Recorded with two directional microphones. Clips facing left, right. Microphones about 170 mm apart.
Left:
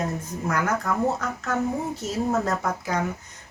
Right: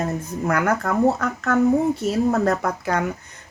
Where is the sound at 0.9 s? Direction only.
60° right (ahead or behind).